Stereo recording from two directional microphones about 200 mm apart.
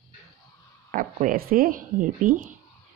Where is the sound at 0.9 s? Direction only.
40° right (ahead or behind).